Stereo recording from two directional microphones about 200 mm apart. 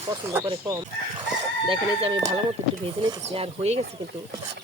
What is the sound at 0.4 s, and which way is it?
Speech, 15° right (ahead or behind).